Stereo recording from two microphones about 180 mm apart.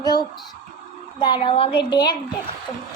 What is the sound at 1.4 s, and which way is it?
Speech, 30° left (ahead or behind).